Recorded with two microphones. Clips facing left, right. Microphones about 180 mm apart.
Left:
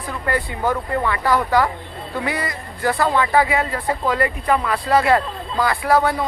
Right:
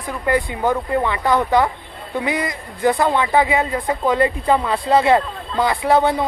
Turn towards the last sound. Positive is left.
turn(degrees=-25)  # may be behind; listen again after turning